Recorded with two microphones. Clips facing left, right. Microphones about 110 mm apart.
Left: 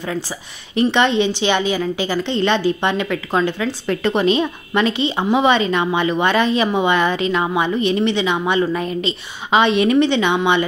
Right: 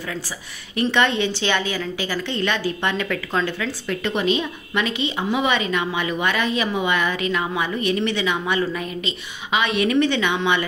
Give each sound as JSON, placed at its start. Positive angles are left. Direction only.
{"t": 0.9, "sound": "a woman's voice", "side_deg": 20}
{"t": 3.8, "sound": "a woman's voice", "side_deg": 40}